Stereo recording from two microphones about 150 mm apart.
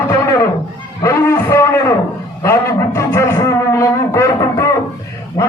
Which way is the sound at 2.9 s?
20° left (ahead or behind).